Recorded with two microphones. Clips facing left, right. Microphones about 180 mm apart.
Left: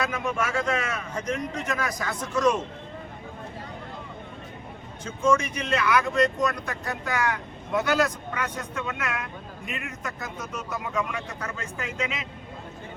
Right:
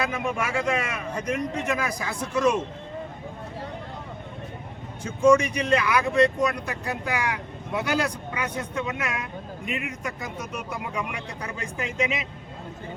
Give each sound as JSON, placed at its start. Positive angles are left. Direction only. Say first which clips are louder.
{"t": 0.0, "sound": "speech", "louder": "even", "side_deg": -10}
{"t": 5.0, "sound": "speech", "louder": "right 5 dB", "side_deg": -10}